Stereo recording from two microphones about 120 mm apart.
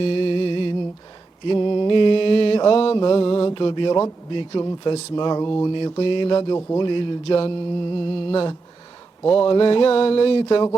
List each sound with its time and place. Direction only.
0.0 s music: 50° left (ahead or behind)
1.5 s mantra: 40° left (ahead or behind)
4.3 s speech: 45° left (ahead or behind)
5.7 s speech: 45° left (ahead or behind)
9.3 s speech: 45° left (ahead or behind)